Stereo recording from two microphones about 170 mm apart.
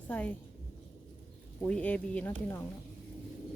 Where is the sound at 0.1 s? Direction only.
10° left (ahead or behind).